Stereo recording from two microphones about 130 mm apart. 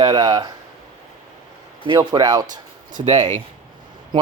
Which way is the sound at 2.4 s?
80° right.